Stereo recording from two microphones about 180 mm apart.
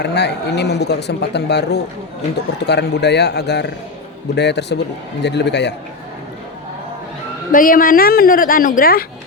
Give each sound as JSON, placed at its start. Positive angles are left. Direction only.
{"t": 0.0, "sound": "speech", "side_deg": 70}
{"t": 7.5, "sound": "a woman's voice", "side_deg": 50}